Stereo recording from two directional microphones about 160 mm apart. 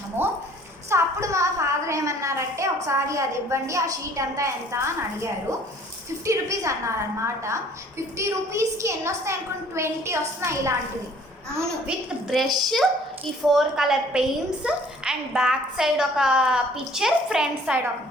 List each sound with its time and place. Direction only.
0.2 s a woman's voice: 15° right (ahead or behind)
11.9 s a woman's voice: centre (ahead or behind)